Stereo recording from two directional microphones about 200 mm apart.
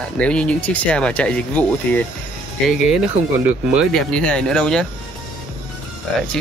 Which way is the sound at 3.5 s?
Centre (ahead or behind).